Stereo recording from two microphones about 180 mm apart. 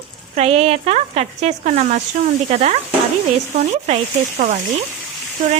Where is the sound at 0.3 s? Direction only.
35° right (ahead or behind).